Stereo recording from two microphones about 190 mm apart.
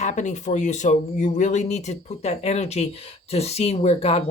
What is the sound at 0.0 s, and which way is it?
Speech, 40° left (ahead or behind).